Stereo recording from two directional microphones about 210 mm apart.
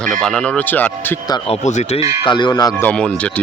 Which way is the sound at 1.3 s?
30° left (ahead or behind).